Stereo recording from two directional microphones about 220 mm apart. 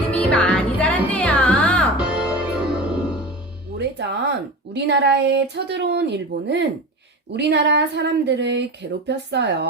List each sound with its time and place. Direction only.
0.1 s music: 5° left (ahead or behind)
3.8 s speech: 50° right (ahead or behind)